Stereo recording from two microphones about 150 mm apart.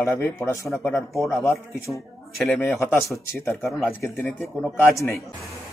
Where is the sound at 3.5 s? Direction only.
Centre (ahead or behind).